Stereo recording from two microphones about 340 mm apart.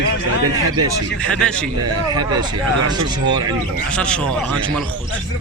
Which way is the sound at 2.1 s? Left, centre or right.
Centre.